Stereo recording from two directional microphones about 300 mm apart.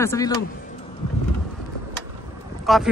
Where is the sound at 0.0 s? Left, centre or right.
Centre.